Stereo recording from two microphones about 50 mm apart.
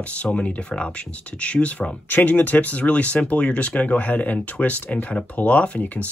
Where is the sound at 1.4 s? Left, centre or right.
Left.